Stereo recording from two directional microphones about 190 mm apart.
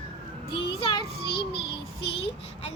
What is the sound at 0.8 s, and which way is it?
Child singing, 25° left (ahead or behind).